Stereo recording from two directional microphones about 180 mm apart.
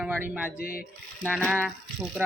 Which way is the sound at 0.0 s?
10° right (ahead or behind).